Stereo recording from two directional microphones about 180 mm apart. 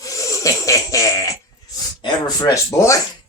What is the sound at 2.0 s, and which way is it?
Speech, 20° left (ahead or behind).